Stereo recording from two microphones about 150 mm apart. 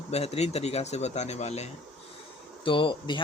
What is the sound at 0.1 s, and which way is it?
Speech, 45° left (ahead or behind).